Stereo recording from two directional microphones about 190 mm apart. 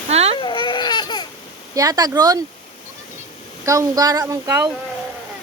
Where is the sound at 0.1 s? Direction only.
35° right (ahead or behind).